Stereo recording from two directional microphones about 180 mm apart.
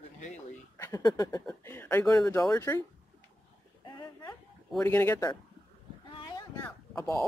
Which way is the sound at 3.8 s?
25° left (ahead or behind).